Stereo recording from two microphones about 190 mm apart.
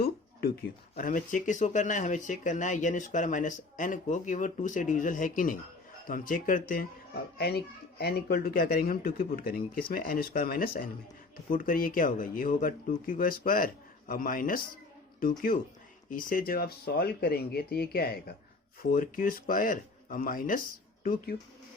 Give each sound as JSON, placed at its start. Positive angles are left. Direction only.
{"t": 0.9, "sound": "speech", "side_deg": 45}
{"t": 7.3, "sound": "speech", "side_deg": 55}